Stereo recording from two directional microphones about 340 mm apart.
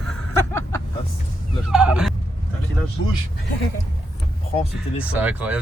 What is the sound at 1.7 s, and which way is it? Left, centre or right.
Speech, centre.